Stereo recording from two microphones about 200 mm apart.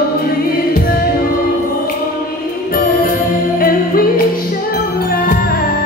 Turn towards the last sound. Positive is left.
turn(degrees=45)  # may be behind; listen again after turning